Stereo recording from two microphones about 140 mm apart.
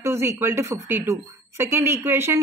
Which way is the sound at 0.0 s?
20° right (ahead or behind).